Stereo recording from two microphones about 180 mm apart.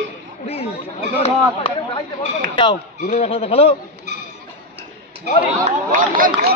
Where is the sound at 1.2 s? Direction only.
30° left (ahead or behind).